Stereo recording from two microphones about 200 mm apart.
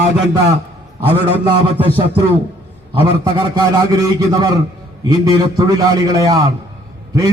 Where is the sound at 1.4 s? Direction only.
25° right (ahead or behind).